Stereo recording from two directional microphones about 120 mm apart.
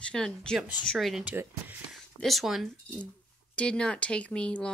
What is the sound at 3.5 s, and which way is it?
Speech, 10° left (ahead or behind).